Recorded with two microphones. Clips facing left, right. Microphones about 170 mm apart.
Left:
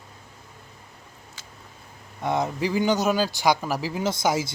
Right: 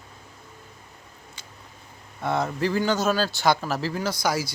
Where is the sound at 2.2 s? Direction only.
15° left (ahead or behind).